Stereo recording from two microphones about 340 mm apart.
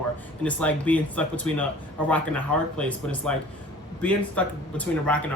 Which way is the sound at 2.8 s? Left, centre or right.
Centre.